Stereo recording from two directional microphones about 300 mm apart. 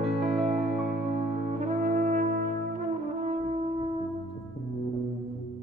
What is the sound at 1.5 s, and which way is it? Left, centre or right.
Brass instrument, right.